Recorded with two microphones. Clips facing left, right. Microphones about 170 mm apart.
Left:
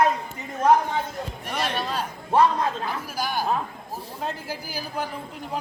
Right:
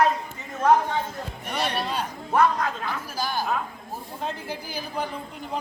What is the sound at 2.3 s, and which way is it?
Speech, 30° left (ahead or behind).